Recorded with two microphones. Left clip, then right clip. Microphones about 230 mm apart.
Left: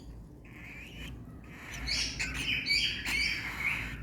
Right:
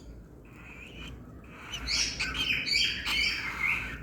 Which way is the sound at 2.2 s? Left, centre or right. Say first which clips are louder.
Right 3 dB; centre.